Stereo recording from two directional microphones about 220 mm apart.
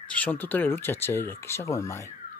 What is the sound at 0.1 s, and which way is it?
Speech, 5° left (ahead or behind).